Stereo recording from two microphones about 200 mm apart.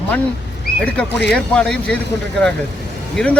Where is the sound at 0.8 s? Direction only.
5° left (ahead or behind).